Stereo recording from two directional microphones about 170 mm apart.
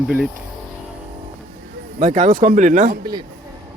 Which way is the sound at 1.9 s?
45° right (ahead or behind).